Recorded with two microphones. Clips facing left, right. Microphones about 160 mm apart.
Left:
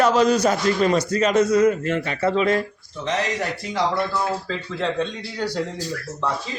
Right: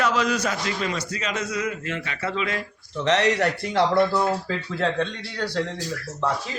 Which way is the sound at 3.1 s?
70° right (ahead or behind).